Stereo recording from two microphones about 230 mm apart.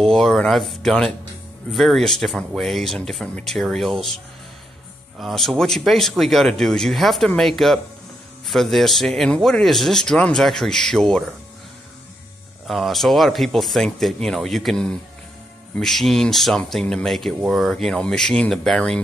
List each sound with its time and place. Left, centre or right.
0.0 s speech: centre
5.2 s speech: centre
12.6 s speech: centre